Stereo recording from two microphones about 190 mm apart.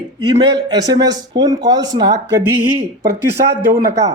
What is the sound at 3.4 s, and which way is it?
Speech, 60° right (ahead or behind).